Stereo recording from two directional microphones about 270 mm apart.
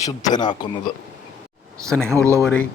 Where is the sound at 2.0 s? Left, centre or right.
Centre.